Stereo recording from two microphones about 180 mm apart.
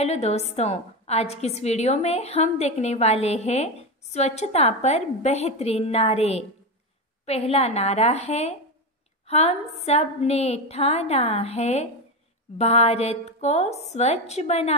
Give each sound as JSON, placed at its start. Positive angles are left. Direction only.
{"t": 0.0, "sound": "a woman's voice", "side_deg": 35}